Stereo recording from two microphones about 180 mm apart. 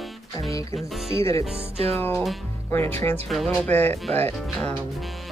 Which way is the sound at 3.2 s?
Centre (ahead or behind).